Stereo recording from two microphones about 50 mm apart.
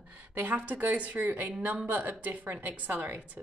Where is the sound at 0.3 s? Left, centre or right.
Right.